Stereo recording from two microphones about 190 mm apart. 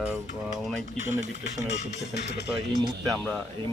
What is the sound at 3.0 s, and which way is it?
Speech, 5° left (ahead or behind).